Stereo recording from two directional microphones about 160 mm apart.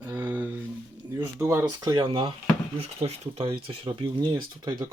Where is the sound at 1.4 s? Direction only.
20° right (ahead or behind).